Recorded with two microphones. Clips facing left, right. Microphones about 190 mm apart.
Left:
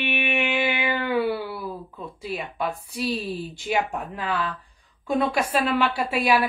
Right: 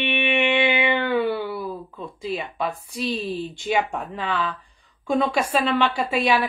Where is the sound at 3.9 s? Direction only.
5° left (ahead or behind).